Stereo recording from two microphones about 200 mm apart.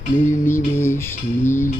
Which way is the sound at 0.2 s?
10° left (ahead or behind).